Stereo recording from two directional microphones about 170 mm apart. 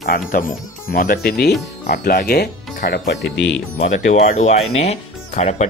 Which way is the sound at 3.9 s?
50° left (ahead or behind).